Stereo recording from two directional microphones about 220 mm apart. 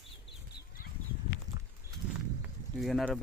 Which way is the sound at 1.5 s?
15° right (ahead or behind).